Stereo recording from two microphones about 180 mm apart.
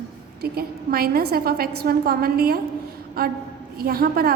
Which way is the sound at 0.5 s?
55° right (ahead or behind).